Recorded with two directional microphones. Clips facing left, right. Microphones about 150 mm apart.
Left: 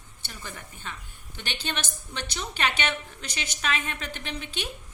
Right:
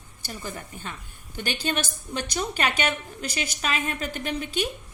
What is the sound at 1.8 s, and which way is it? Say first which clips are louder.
A woman's voice: right 5 dB; 10° right (ahead or behind).